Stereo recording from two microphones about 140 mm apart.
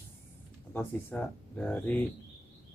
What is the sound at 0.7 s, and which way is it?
Speech, 10° left (ahead or behind).